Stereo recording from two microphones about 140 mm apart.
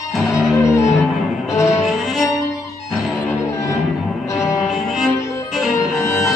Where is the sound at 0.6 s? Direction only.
20° left (ahead or behind).